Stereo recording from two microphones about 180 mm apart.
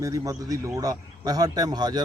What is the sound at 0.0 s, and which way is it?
A man's voice, 20° right (ahead or behind).